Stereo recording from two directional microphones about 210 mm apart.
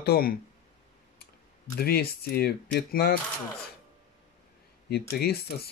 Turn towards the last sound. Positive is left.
turn(degrees=50)  # may be behind; listen again after turning